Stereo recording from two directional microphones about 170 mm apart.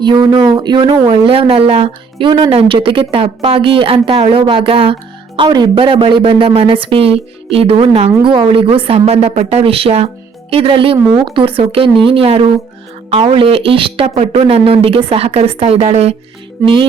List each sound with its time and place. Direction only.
0.0 s speech: 25° right (ahead or behind)